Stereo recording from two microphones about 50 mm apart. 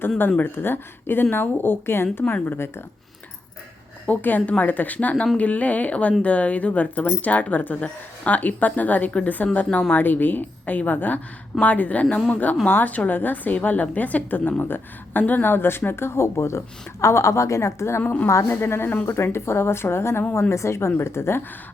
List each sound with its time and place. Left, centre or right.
0.5 s speech: left
4.0 s a woman's voice: left
18.0 s speech: left
18.4 s speech: left
20.5 s speech: left